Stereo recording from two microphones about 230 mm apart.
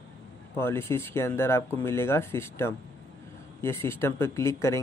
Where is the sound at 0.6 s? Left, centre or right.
Centre.